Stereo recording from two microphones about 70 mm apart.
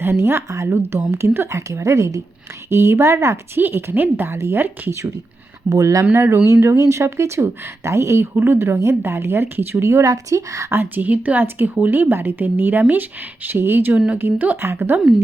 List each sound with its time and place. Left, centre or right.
0.0 s a woman's voice: right
5.6 s speech: right
6.1 s a woman's voice: right
6.5 s a woman's voice: right
10.8 s a woman's voice: right